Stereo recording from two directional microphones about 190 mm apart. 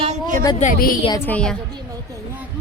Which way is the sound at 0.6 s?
45° left (ahead or behind).